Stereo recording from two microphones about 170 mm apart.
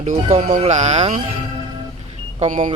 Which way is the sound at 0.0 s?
45° right (ahead or behind).